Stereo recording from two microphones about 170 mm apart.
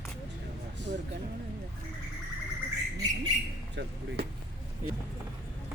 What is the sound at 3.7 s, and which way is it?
Speech, 90° right.